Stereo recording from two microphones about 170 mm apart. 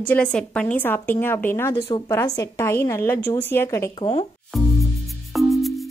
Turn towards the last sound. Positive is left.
turn(degrees=0)  # may be behind; listen again after turning